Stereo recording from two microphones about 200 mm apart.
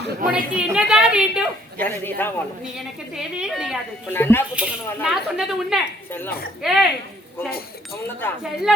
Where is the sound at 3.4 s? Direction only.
5° right (ahead or behind).